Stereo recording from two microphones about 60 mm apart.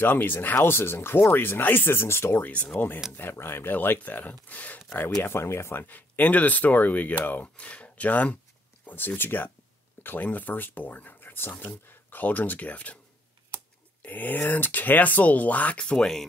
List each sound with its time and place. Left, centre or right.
0.0 s speech: left
2.4 s speech: left
3.1 s speech: left
5.2 s speech: left
5.9 s speech: left
14.0 s speech: left
15.8 s speech: centre